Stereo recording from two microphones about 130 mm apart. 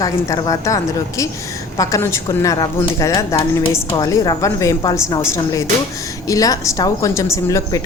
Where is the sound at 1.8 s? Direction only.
20° left (ahead or behind).